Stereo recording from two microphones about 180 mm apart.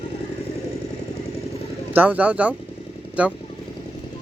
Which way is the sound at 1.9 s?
10° right (ahead or behind).